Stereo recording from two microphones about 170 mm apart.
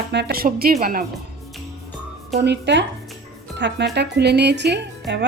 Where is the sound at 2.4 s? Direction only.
90° right.